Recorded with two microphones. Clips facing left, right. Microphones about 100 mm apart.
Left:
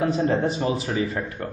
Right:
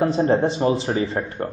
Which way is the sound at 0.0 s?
35° right (ahead or behind).